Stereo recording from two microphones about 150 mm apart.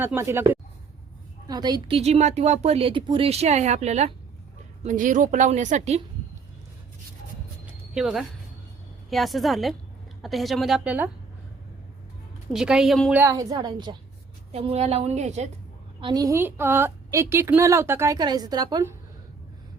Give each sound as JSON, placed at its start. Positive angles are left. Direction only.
{"t": 0.0, "sound": "a woman's voice", "side_deg": -15}
{"t": 2.0, "sound": "speech", "side_deg": -45}
{"t": 4.8, "sound": "a woman's voice", "side_deg": -60}
{"t": 7.9, "sound": "a woman's voice", "side_deg": -5}
{"t": 12.5, "sound": "a woman's voice", "side_deg": -5}
{"t": 13.1, "sound": "a woman's voice", "side_deg": -20}
{"t": 14.5, "sound": "speech", "side_deg": -45}
{"t": 16.0, "sound": "a woman's voice", "side_deg": -35}
{"t": 16.2, "sound": "a woman's voice", "side_deg": -15}